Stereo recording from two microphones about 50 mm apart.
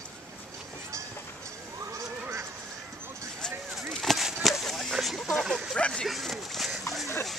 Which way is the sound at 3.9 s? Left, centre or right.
Centre.